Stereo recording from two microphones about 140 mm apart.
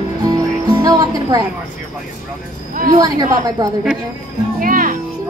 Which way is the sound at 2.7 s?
75° right (ahead or behind).